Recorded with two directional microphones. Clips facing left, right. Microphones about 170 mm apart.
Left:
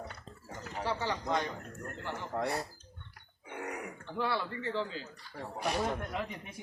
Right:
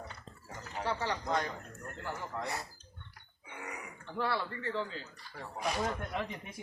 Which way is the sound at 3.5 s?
55° left (ahead or behind).